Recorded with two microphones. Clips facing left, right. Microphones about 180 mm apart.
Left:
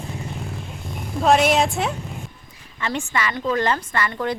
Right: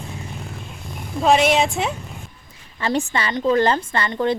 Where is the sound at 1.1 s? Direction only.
Centre (ahead or behind).